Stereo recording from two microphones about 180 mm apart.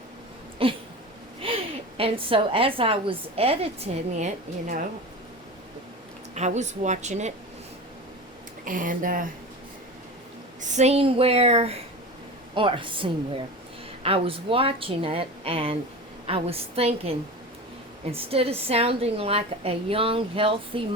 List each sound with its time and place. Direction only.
0.6 s a sound: 30° right (ahead or behind)
1.4 s a woman's voice: 30° right (ahead or behind)
6.3 s a woman's voice: 40° right (ahead or behind)
8.6 s speech: 50° right (ahead or behind)
10.6 s a woman's voice: 40° right (ahead or behind)